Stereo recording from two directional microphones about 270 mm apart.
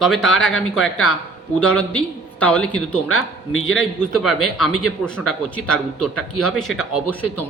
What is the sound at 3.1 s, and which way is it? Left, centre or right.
Speech, left.